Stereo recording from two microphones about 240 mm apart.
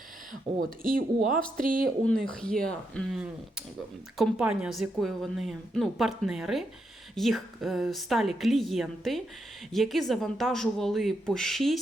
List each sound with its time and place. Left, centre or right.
0.5 s speech: right
0.8 s speech: right
2.3 s a woman's voice: centre